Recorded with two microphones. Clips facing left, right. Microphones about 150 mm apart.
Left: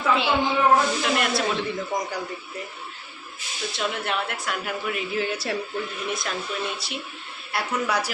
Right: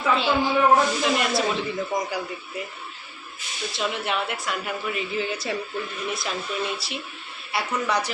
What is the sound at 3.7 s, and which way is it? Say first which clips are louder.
A man's voice: right 1 dB; centre (ahead or behind).